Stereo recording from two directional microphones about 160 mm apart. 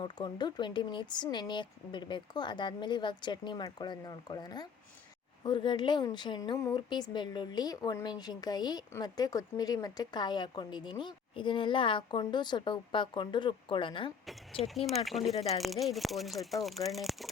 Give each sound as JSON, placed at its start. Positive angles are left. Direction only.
{"t": 0.0, "sound": "a woman's voice", "side_deg": 30}
{"t": 14.8, "sound": "speech", "side_deg": 0}
{"t": 15.3, "sound": "speech", "side_deg": 40}
{"t": 15.5, "sound": "speech", "side_deg": 0}